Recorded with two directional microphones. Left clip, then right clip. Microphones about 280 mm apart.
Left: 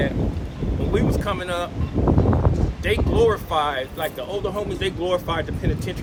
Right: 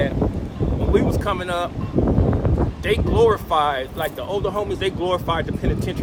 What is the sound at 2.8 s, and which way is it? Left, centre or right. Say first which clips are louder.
Speech: right 2 dB; centre.